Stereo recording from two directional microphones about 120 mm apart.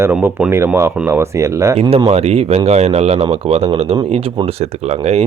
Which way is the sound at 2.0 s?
60° right (ahead or behind).